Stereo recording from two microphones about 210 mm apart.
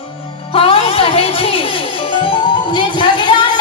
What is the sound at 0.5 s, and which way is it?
Music, 25° left (ahead or behind).